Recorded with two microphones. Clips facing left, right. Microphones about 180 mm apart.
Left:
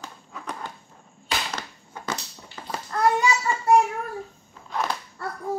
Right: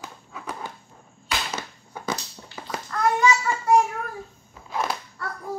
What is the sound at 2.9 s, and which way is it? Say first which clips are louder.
Babbling: left 2 dB; 30° left (ahead or behind).